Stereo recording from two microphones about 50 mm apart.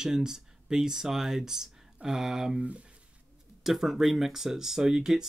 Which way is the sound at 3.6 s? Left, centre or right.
Centre.